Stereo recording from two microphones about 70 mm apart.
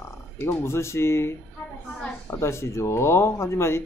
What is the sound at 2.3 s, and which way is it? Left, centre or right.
Speech, left.